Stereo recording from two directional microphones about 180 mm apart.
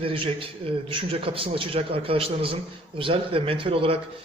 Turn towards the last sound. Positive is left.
turn(degrees=-30)  # may be behind; listen again after turning